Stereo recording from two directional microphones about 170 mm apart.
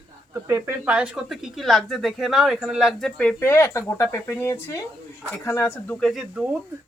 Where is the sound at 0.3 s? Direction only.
15° right (ahead or behind); by 6.0 s 15° left (ahead or behind).